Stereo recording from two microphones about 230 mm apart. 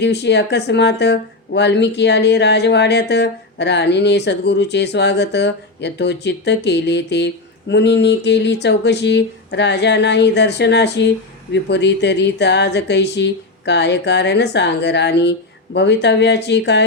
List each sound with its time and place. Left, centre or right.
0.0 s speech: left